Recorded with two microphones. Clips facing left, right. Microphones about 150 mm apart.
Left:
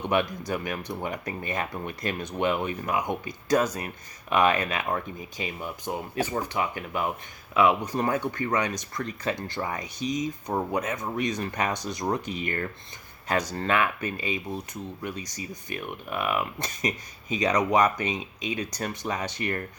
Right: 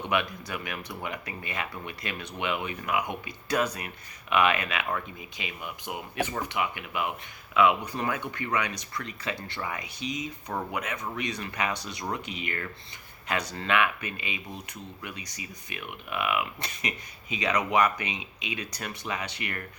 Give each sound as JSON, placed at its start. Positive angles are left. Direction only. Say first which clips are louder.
{"t": 0.1, "sound": "speech", "louder": "left 4 dB", "side_deg": 40}
{"t": 7.9, "sound": "speech", "louder": "left 5 dB", "side_deg": 40}